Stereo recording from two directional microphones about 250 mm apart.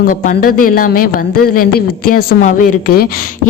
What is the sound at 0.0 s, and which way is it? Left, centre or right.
A woman's voice, left.